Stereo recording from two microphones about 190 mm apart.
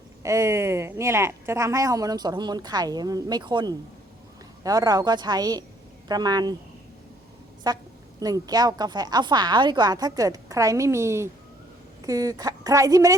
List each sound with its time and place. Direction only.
0.2 s speech: 15° right (ahead or behind)
7.6 s speech: 20° right (ahead or behind)